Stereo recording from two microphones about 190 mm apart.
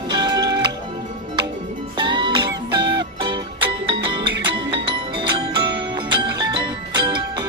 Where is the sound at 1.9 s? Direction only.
25° right (ahead or behind).